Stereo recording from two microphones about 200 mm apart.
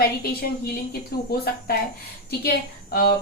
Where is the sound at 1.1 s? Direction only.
50° left (ahead or behind).